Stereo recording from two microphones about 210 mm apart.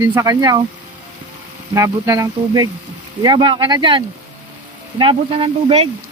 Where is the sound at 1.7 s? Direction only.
15° right (ahead or behind).